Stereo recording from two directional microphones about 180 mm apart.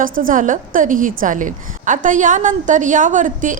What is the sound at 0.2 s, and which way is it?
A woman's voice, 50° right (ahead or behind).